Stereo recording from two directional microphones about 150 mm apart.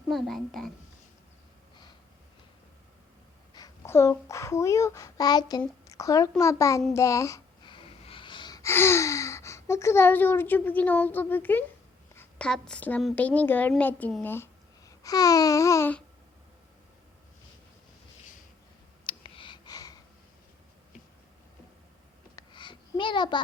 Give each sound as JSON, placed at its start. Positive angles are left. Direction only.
{"t": 0.1, "sound": "a child's voice", "side_deg": 0}
{"t": 3.5, "sound": "a child's voice", "side_deg": 20}
{"t": 6.4, "sound": "child singing", "side_deg": 20}
{"t": 7.6, "sound": "gasp", "side_deg": 35}
{"t": 8.7, "sound": "speech", "side_deg": 15}
{"t": 12.1, "sound": "a sound", "side_deg": 15}
{"t": 12.5, "sound": "speech", "side_deg": 5}
{"t": 19.0, "sound": "clicking", "side_deg": 35}
{"t": 22.4, "sound": "a sound", "side_deg": 30}